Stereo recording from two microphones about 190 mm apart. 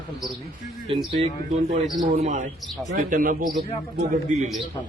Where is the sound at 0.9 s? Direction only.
30° right (ahead or behind).